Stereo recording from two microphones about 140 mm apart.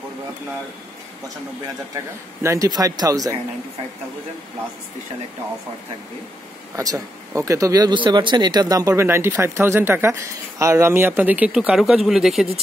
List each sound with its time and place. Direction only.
2.4 s speech: 25° right (ahead or behind)
6.8 s speech: 25° right (ahead or behind); by 12.4 s 5° right (ahead or behind)